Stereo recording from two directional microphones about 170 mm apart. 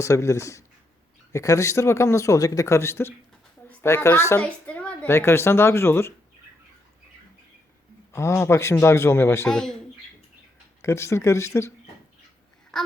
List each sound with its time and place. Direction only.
0.0 s speech: 15° left (ahead or behind)
8.1 s speech: 15° left (ahead or behind)
9.5 s speech: 5° left (ahead or behind)
10.8 s speech: 15° left (ahead or behind)